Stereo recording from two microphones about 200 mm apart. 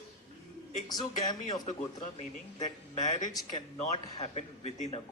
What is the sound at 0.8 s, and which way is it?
Speech, 20° left (ahead or behind).